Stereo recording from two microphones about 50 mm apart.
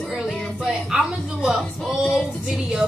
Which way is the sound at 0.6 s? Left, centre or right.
Centre.